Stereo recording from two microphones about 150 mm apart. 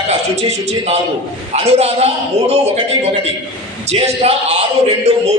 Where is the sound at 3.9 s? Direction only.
45° right (ahead or behind).